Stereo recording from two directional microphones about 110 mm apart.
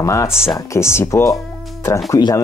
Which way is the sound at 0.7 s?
25° left (ahead or behind).